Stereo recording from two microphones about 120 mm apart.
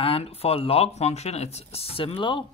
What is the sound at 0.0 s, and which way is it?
Speech, 50° left (ahead or behind).